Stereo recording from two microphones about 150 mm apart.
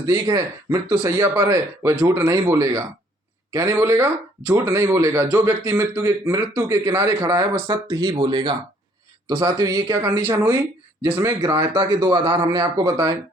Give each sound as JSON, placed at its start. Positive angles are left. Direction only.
{"t": 0.0, "sound": "speech", "side_deg": -20}